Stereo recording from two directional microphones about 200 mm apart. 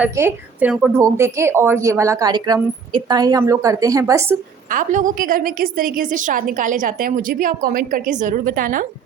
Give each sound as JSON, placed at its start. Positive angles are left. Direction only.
{"t": 0.0, "sound": "a woman's voice", "side_deg": -10}
{"t": 4.7, "sound": "a woman's voice", "side_deg": -40}